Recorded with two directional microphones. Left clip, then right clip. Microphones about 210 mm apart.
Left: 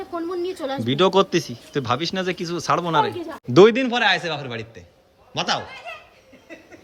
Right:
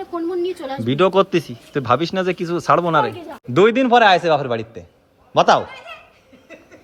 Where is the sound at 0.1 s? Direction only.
Centre (ahead or behind).